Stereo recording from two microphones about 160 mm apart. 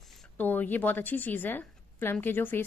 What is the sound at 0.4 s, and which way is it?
Speech, 10° left (ahead or behind).